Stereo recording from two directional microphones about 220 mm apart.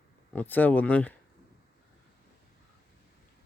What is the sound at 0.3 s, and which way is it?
Speech, 10° left (ahead or behind).